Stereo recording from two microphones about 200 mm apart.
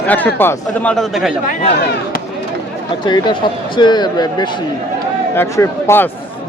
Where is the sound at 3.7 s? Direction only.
20° left (ahead or behind).